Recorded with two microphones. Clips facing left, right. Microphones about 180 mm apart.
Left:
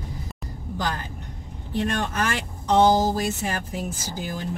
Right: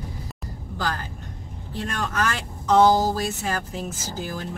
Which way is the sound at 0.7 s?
20° left (ahead or behind).